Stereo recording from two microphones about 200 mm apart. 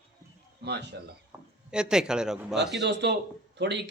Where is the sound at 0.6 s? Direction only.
60° right (ahead or behind).